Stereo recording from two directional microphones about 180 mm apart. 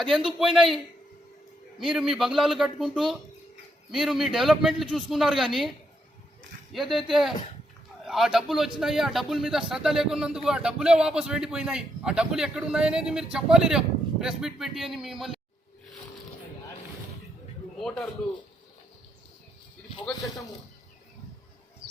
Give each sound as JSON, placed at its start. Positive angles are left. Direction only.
{"t": 0.3, "sound": "speech", "side_deg": 0}
{"t": 1.8, "sound": "speech", "side_deg": 0}
{"t": 6.7, "sound": "speech", "side_deg": 0}
{"t": 17.7, "sound": "a man's voice", "side_deg": 5}